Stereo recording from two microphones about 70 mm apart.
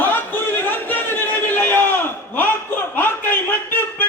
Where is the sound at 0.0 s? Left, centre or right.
Left.